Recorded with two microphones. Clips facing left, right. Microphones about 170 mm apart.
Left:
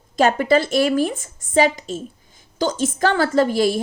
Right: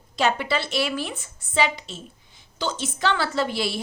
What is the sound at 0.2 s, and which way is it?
A woman's voice, 45° left (ahead or behind).